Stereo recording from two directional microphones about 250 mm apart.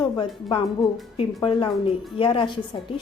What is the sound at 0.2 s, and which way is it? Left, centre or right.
Speech, centre.